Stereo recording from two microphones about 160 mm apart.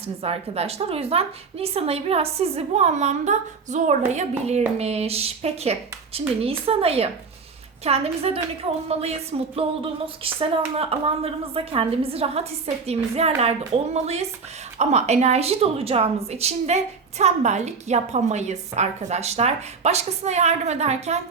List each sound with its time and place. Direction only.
0.2 s a woman's voice: 40° right (ahead or behind)